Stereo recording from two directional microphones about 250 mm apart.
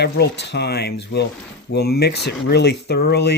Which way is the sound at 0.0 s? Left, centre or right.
Left.